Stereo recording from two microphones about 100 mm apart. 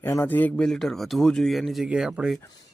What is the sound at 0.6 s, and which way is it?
Speech, 5° left (ahead or behind).